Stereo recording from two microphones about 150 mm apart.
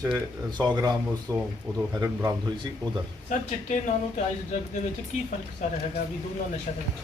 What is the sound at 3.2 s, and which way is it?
Speech, 55° left (ahead or behind).